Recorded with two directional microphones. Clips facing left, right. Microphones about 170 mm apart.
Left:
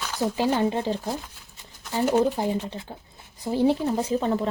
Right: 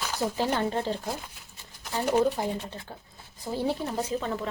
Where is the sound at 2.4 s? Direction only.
15° left (ahead or behind).